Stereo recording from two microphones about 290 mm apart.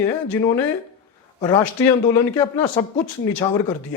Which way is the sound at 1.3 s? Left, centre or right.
Centre.